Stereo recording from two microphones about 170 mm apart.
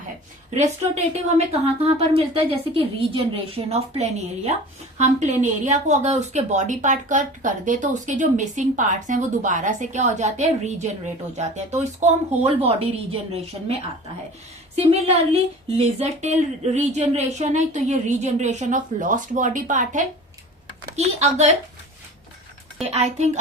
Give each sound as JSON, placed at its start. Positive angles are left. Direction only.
{"t": 0.5, "sound": "speech", "side_deg": -45}
{"t": 14.8, "sound": "speech", "side_deg": -35}
{"t": 22.8, "sound": "speech", "side_deg": -40}